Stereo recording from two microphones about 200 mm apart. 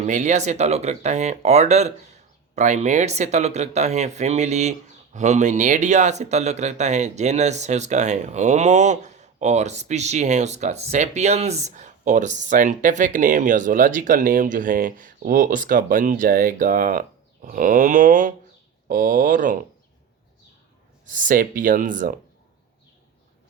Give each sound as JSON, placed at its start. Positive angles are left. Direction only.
{"t": 0.0, "sound": "speech", "side_deg": -35}
{"t": 21.1, "sound": "speech", "side_deg": -40}